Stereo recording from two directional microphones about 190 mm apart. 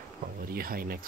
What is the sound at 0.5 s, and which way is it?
Speech, 50° right (ahead or behind).